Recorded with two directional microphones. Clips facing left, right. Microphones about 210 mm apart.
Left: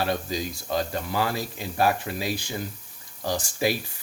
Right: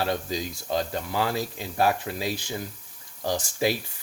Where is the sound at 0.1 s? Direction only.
20° right (ahead or behind).